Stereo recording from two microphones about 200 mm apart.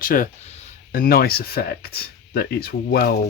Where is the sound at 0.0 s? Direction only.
45° left (ahead or behind).